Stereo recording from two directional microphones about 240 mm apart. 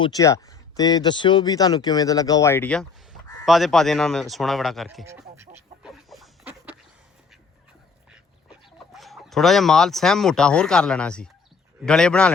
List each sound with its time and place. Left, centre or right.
0.0 s speech: centre
5.8 s a sound: centre
8.1 s speech: centre